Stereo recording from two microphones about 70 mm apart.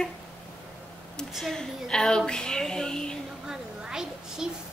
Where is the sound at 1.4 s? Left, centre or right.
Centre.